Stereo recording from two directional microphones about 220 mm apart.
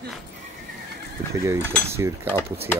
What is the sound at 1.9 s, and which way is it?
Mechanisms, 10° right (ahead or behind).